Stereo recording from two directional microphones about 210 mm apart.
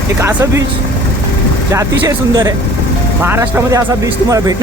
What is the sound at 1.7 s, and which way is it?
Speech, 10° right (ahead or behind).